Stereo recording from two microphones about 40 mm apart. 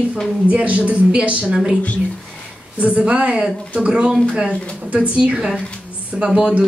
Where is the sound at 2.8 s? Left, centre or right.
Right.